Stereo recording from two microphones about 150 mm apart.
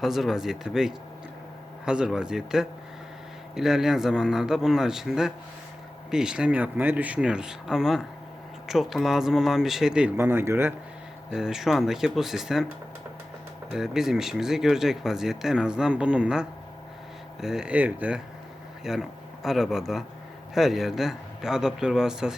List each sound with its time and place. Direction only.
0.0 s speech: centre (ahead or behind)
10.2 s speech: 15° right (ahead or behind)
11.3 s speech: 5° right (ahead or behind)
13.7 s speech: 5° right (ahead or behind)